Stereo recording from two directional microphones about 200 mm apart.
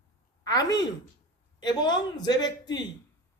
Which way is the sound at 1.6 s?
20° left (ahead or behind).